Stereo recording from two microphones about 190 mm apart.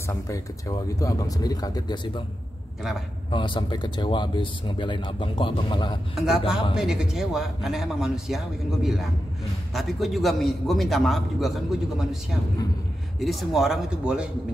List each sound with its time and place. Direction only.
0.1 s speech: 15° left (ahead or behind)
3.3 s speech: 25° left (ahead or behind)
6.1 s a man's voice: centre (ahead or behind)
9.8 s a man's voice: centre (ahead or behind)